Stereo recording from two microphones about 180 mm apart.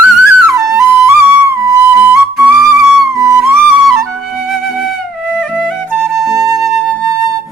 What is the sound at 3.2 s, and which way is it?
Music, 20° right (ahead or behind).